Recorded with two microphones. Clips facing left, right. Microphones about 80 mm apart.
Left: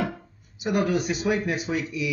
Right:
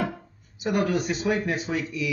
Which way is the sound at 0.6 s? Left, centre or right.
Centre.